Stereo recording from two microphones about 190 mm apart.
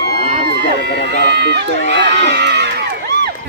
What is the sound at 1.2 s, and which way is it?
Run, 65° right (ahead or behind).